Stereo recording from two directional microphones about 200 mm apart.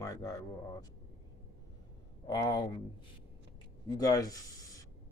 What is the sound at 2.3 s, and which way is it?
Speech, 20° left (ahead or behind).